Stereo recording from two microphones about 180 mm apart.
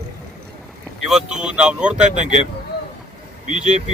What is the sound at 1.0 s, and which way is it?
Speech, 5° right (ahead or behind).